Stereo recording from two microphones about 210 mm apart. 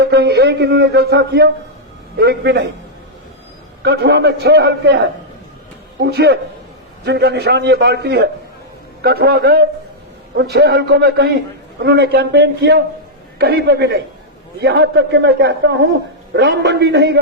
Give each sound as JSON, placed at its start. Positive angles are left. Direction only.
{"t": 0.0, "sound": "a man's voice", "side_deg": -50}
{"t": 3.8, "sound": "a man's voice", "side_deg": -50}
{"t": 6.0, "sound": "a man's voice", "side_deg": -50}